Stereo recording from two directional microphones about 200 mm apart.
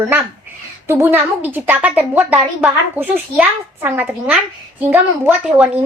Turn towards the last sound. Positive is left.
turn(degrees=-5)  # may be behind; listen again after turning